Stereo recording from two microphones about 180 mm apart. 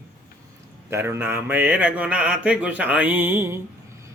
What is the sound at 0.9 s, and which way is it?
A man's voice, 15° right (ahead or behind).